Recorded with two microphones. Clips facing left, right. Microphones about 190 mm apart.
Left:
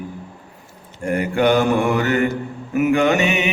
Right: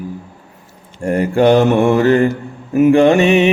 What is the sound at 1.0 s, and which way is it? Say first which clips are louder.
Mantra: right 5 dB; 30° right (ahead or behind).